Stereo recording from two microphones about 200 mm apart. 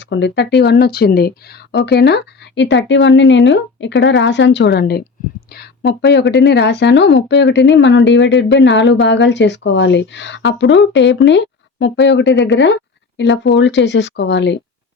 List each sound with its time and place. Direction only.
0.0 s a woman's voice: 60° left (ahead or behind)